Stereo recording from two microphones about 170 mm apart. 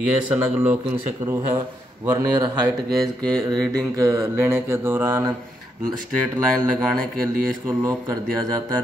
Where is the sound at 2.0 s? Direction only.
20° right (ahead or behind).